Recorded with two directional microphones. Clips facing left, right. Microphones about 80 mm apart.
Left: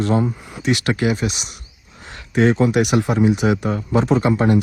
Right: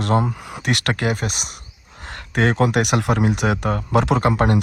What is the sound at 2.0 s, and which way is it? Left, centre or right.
Speech, right.